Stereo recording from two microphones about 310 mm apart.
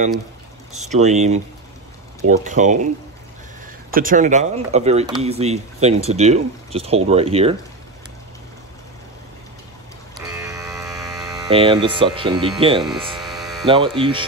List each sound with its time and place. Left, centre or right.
0.8 s speech: right
2.4 s speech: right
3.9 s speech: right
10.1 s hum: centre
12.5 s speech: centre
12.8 s hum: centre
13.7 s speech: centre